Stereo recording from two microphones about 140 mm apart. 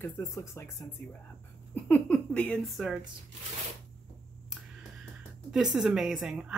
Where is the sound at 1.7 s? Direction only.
10° left (ahead or behind).